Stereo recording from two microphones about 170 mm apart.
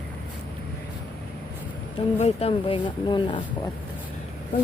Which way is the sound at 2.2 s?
35° left (ahead or behind).